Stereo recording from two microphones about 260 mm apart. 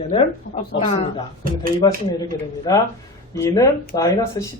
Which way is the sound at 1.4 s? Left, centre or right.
Right.